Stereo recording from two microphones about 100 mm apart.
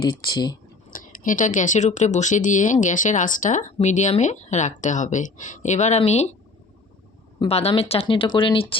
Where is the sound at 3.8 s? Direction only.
75° left (ahead or behind).